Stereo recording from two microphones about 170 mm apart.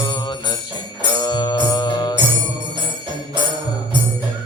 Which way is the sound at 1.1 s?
25° left (ahead or behind).